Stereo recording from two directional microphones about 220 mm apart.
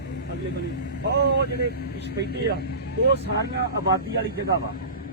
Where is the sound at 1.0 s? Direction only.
50° right (ahead or behind).